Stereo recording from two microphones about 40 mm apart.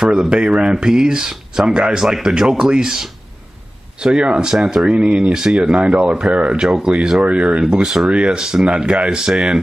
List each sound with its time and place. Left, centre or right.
0.0 s speech: centre
4.9 s speech: right
6.3 s speech: right
6.7 s speech: centre
7.8 s speech: centre
8.1 s speech: right